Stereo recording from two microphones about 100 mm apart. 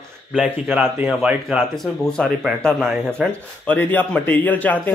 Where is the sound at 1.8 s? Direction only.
5° left (ahead or behind).